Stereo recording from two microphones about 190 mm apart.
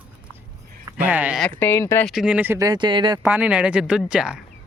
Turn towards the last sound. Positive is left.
turn(degrees=-5)  # may be behind; listen again after turning